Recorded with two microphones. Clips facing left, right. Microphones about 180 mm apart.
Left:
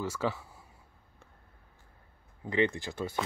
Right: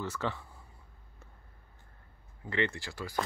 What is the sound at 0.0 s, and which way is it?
Speech, 10° left (ahead or behind).